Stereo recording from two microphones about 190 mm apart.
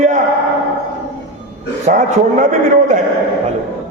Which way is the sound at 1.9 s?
40° right (ahead or behind).